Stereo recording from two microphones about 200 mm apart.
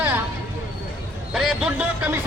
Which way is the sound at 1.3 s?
Centre (ahead or behind).